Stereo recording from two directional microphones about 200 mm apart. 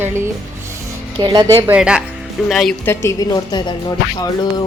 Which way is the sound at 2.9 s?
15° left (ahead or behind).